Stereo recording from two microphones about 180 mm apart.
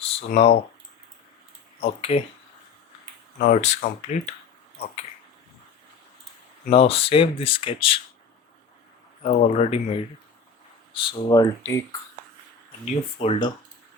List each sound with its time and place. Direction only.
0.3 s speech: 60° left (ahead or behind)
1.8 s speech: 35° left (ahead or behind)
3.4 s speech: 40° left (ahead or behind)
6.7 s speech: 30° left (ahead or behind)
9.2 s speech: 40° left (ahead or behind); by 11.9 s 15° left (ahead or behind)
12.9 s speech: 35° left (ahead or behind)